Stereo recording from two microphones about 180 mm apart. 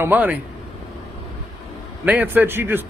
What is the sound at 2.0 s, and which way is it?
Speech, 10° right (ahead or behind).